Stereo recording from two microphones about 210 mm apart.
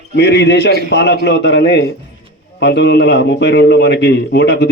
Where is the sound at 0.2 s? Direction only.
55° left (ahead or behind).